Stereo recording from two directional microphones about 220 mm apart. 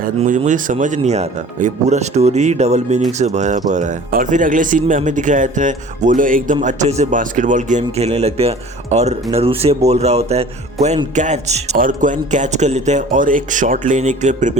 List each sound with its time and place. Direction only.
0.0 s speech: 35° right (ahead or behind)